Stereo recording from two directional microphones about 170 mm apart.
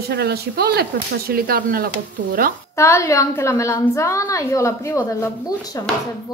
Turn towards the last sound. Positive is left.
turn(degrees=20)  # may be behind; listen again after turning